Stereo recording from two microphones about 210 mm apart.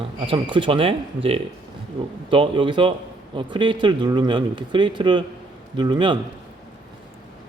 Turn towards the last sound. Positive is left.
turn(degrees=-20)  # may be behind; listen again after turning